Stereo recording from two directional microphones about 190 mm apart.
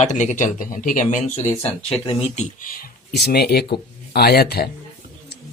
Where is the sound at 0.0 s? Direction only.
40° left (ahead or behind).